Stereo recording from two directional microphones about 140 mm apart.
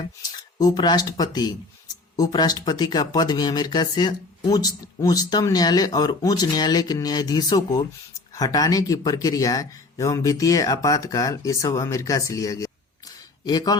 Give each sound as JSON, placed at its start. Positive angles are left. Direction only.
{"t": 0.2, "sound": "speech", "side_deg": 30}